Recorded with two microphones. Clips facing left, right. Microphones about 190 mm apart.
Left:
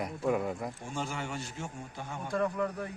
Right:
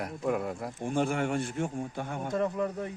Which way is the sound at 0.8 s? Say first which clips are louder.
Right 12 dB; 55° right (ahead or behind).